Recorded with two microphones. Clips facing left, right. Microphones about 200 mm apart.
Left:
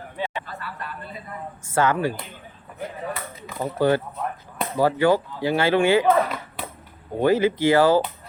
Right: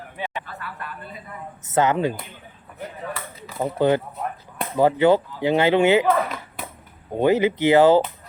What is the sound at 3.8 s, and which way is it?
Speech, 20° right (ahead or behind).